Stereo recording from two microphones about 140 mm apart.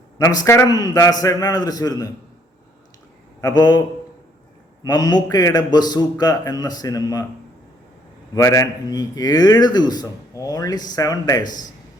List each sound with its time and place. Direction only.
0.2 s speech: 25° left (ahead or behind)
3.4 s speech: 30° left (ahead or behind)
8.4 s speech: 25° left (ahead or behind)